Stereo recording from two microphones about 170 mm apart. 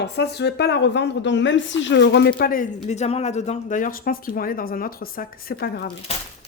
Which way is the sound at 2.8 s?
40° left (ahead or behind).